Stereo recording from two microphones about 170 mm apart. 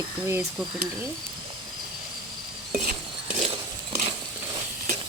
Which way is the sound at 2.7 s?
50° right (ahead or behind).